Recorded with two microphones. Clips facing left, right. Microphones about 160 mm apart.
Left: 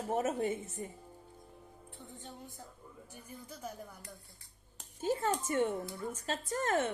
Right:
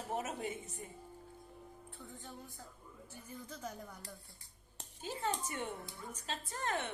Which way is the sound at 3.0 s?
10° left (ahead or behind).